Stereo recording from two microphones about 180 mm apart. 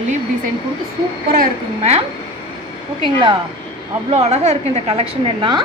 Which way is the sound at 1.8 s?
35° right (ahead or behind).